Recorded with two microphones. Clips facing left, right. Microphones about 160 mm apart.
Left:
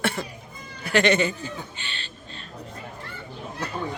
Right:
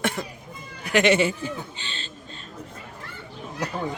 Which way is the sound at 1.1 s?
10° right (ahead or behind).